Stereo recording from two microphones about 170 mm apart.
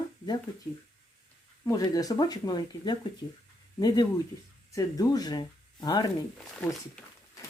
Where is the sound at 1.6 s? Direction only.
20° left (ahead or behind).